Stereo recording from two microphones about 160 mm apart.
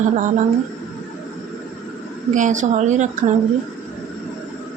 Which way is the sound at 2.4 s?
50° right (ahead or behind).